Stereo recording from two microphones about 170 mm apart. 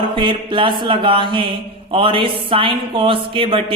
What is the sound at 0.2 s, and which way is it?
A man's voice, 30° right (ahead or behind).